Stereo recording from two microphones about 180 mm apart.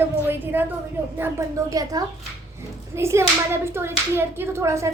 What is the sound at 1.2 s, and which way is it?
Speech, 15° right (ahead or behind).